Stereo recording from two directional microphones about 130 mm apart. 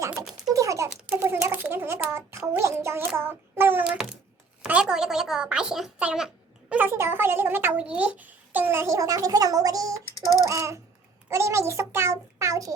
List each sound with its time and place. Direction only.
0.4 s typing: 25° right (ahead or behind)
0.9 s a sound: 10° right (ahead or behind)
2.6 s child singing: 20° right (ahead or behind)
4.6 s a woman's voice: 5° right (ahead or behind); by 12.7 s 25° right (ahead or behind)